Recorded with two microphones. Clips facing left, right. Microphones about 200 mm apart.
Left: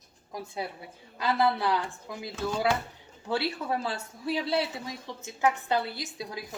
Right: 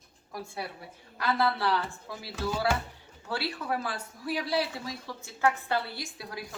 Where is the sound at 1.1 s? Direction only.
20° left (ahead or behind).